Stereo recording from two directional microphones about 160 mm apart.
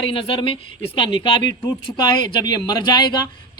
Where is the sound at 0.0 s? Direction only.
35° left (ahead or behind).